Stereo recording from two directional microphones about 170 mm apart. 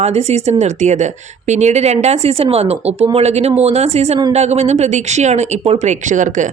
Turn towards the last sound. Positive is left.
turn(degrees=-50)  # may be behind; listen again after turning